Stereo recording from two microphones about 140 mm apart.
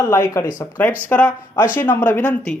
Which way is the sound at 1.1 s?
10° left (ahead or behind).